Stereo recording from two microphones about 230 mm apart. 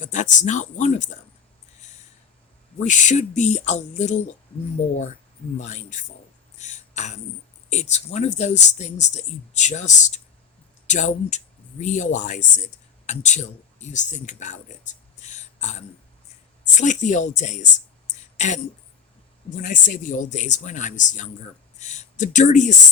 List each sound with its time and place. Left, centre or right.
0.0 s speech: left
2.7 s speech: left
5.5 s speech: left
6.6 s a sound: left
7.7 s speech: left
18.1 s a sound: left
19.6 s speech: left